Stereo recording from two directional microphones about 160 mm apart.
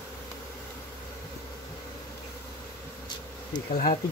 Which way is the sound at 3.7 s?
65° left (ahead or behind).